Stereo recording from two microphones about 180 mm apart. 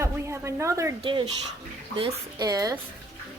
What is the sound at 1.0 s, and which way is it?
Speech, 25° right (ahead or behind).